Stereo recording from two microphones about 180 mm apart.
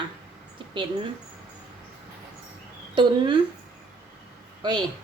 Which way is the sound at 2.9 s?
25° right (ahead or behind).